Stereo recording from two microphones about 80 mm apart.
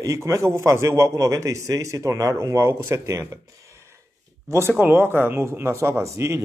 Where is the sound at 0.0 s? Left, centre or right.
Right.